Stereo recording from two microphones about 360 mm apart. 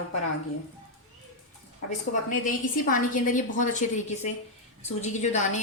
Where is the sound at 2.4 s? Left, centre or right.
Left.